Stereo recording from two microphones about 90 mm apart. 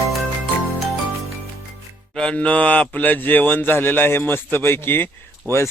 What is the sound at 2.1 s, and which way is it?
A man's voice, 10° left (ahead or behind).